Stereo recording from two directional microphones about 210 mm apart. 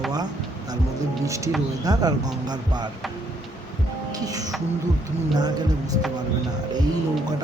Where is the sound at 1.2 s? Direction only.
15° right (ahead or behind).